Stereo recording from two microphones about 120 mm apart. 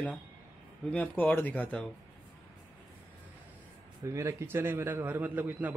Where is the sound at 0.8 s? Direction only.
15° left (ahead or behind).